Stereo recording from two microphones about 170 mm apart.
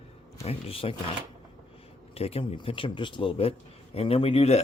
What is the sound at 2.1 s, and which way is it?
Speech, 35° left (ahead or behind).